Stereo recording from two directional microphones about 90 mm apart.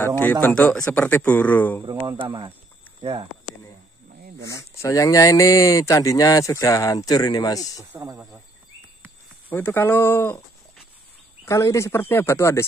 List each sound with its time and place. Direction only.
0.0 s speech: 20° left (ahead or behind)
2.0 s speech: 60° right (ahead or behind)
3.0 s speech: 80° right
4.5 s speech: 35° left (ahead or behind)
9.5 s speech: 20° left (ahead or behind)
11.4 s speech: 35° left (ahead or behind)